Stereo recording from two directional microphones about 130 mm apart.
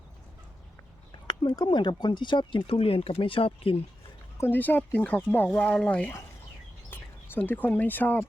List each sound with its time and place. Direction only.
1.3 s speech: 35° left (ahead or behind)
4.4 s speech: 15° left (ahead or behind)